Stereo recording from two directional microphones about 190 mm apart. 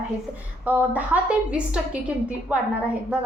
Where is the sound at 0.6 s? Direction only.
10° right (ahead or behind).